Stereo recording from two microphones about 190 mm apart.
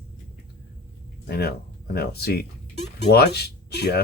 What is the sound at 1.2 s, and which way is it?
Speech, 55° left (ahead or behind).